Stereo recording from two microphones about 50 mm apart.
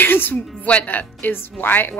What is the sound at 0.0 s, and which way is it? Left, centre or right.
Music, left.